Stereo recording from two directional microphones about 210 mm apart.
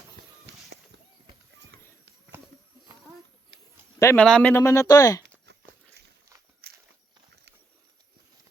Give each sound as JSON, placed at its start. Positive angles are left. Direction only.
{"t": 1.7, "sound": "run", "side_deg": -50}
{"t": 4.0, "sound": "speech", "side_deg": 5}
{"t": 5.5, "sound": "a sound", "side_deg": -55}
{"t": 6.6, "sound": "walk", "side_deg": -50}